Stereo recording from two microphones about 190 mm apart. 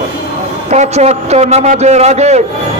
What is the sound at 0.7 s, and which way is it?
A man's voice, 35° right (ahead or behind).